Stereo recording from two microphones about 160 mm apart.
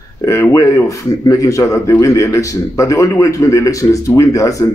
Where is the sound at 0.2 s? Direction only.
20° left (ahead or behind).